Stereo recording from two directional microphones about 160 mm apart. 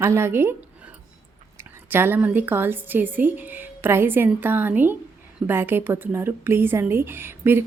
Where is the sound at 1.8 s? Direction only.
15° right (ahead or behind).